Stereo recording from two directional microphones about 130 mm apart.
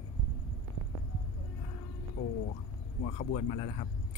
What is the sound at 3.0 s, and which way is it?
Speech, 85° left.